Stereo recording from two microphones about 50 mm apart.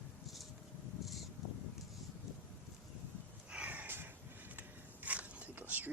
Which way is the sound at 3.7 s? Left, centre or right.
Right.